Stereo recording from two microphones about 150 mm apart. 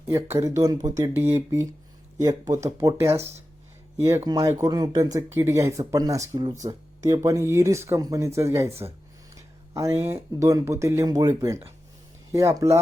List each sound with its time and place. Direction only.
0.1 s speech: 20° right (ahead or behind)